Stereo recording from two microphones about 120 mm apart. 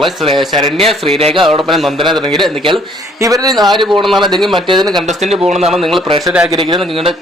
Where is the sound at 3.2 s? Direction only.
30° right (ahead or behind).